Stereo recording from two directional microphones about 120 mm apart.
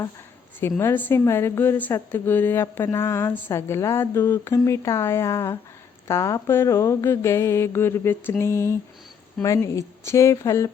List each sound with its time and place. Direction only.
0.8 s a woman's voice: 15° left (ahead or behind)